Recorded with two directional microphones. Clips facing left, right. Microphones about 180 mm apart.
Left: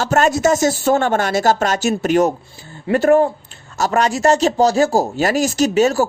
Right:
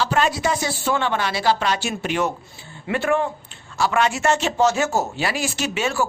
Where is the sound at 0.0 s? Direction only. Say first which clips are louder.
Left 6 dB; 45° left (ahead or behind).